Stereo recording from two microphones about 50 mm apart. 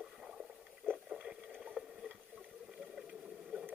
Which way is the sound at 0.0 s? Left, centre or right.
Centre.